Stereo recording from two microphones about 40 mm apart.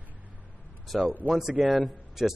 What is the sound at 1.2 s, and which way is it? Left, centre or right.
Speech, left.